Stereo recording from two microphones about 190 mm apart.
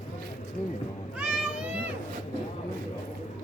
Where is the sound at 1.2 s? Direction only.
5° right (ahead or behind).